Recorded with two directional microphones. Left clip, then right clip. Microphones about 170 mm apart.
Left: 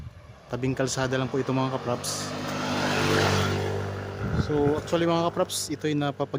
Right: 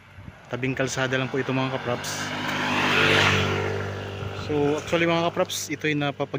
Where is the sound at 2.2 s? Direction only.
45° left (ahead or behind).